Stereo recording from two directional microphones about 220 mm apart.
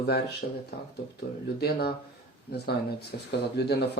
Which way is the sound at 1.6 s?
45° left (ahead or behind).